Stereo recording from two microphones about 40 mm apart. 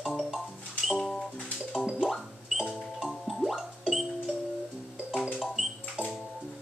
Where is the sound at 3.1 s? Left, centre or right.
Centre.